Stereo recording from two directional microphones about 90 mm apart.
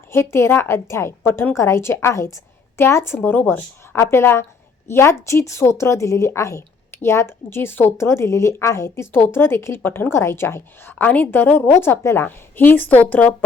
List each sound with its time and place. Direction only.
0.1 s speech: 30° left (ahead or behind)
10.9 s speech: 15° left (ahead or behind)